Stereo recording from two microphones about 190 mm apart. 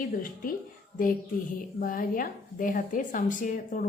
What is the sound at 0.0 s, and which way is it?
Speech, 45° left (ahead or behind).